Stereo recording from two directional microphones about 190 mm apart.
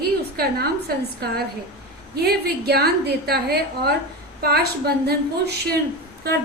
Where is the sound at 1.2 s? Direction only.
55° right (ahead or behind).